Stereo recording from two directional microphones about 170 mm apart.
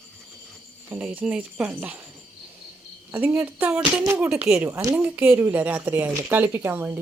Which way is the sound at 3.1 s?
15° right (ahead or behind).